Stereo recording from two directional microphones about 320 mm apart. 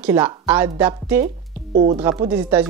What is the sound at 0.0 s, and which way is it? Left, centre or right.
Speech, centre.